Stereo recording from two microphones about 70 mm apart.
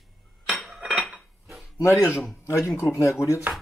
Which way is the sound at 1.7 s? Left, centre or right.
Left.